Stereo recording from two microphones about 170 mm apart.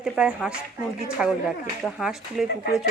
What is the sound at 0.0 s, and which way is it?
Speech, 5° right (ahead or behind).